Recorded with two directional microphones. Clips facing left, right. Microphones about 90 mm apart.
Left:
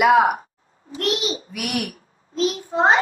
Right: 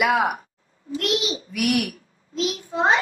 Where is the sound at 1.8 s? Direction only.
40° left (ahead or behind).